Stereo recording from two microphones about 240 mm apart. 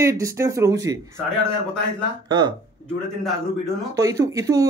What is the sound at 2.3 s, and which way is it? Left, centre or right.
Speech, centre.